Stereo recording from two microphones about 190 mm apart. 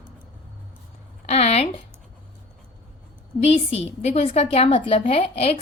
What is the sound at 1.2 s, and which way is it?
Speech, 35° left (ahead or behind).